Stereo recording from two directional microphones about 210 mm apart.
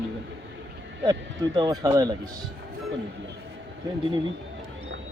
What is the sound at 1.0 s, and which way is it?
Speech, 20° right (ahead or behind).